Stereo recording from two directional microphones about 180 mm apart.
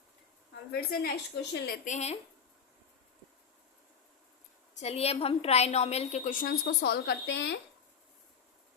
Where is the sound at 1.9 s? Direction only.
40° left (ahead or behind).